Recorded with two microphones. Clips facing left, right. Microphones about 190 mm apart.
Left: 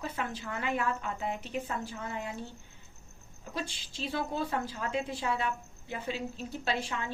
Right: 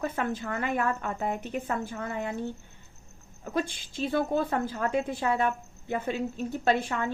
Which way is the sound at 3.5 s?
50° right (ahead or behind).